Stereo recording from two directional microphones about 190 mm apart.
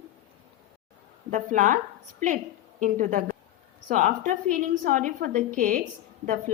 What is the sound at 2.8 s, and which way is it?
A woman's voice, 45° right (ahead or behind).